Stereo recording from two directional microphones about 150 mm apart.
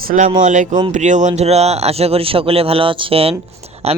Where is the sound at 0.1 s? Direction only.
55° right (ahead or behind).